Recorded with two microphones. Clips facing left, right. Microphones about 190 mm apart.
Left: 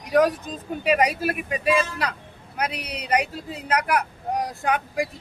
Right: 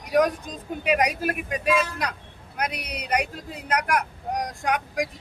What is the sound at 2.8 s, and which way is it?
Speech, 10° right (ahead or behind).